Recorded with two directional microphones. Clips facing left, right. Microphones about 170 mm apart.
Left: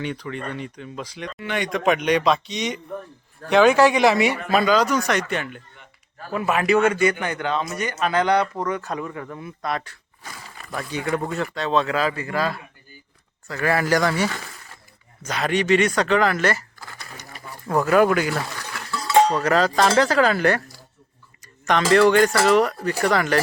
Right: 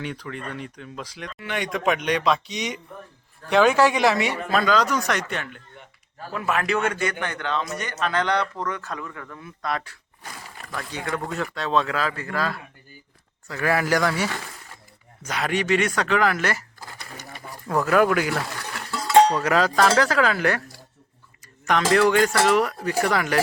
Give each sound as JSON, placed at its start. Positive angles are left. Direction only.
{"t": 0.0, "sound": "a man's voice", "side_deg": 0}
{"t": 9.4, "sound": "speech", "side_deg": 5}
{"t": 10.8, "sound": "speech", "side_deg": 20}
{"t": 11.3, "sound": "speech", "side_deg": 5}
{"t": 13.5, "sound": "speech", "side_deg": -5}
{"t": 15.2, "sound": "speech", "side_deg": -10}
{"t": 17.7, "sound": "speech", "side_deg": 5}
{"t": 19.4, "sound": "speech", "side_deg": -5}